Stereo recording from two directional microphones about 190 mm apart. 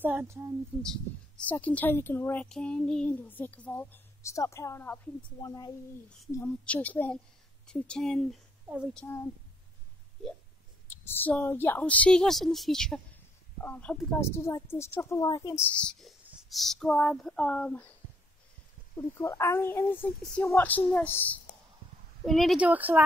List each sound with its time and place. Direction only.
0.0 s speech: 10° right (ahead or behind)
0.8 s speech: 5° left (ahead or behind)
6.3 s speech: 10° left (ahead or behind)
8.9 s speech: 10° left (ahead or behind)
10.9 s a woman's voice: 10° left (ahead or behind)
18.9 s speech: 15° left (ahead or behind); by 23.0 s 10° right (ahead or behind)